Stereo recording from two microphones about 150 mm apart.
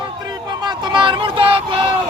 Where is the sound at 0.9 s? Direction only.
35° right (ahead or behind).